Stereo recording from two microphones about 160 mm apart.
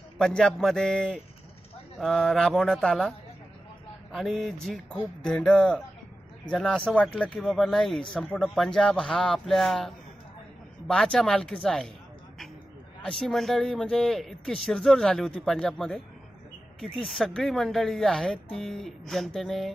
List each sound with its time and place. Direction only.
0.2 s a man's voice: 5° left (ahead or behind)
13.0 s a man's voice: 5° left (ahead or behind)
17.0 s a man's voice: centre (ahead or behind)